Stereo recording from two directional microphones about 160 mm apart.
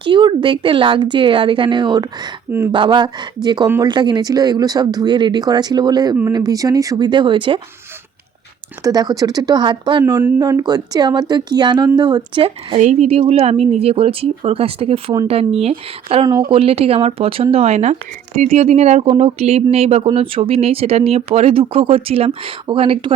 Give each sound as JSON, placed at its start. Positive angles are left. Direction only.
{"t": 0.0, "sound": "speech", "side_deg": -30}
{"t": 8.8, "sound": "speech", "side_deg": -25}
{"t": 12.8, "sound": "speech", "side_deg": -45}